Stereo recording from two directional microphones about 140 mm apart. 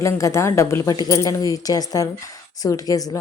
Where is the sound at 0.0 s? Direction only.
20° left (ahead or behind).